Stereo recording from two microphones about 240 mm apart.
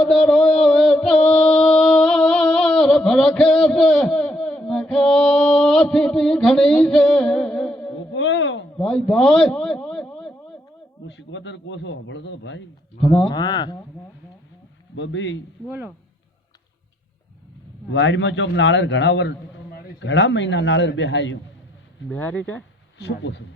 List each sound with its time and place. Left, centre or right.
0.1 s music: centre
8.1 s a sound: left
8.8 s a sound: centre
11.0 s a man's voice: left
13.0 s speech: left
14.9 s a man's voice: left
17.9 s a man's voice: left
22.1 s speech: centre
23.0 s a man's voice: left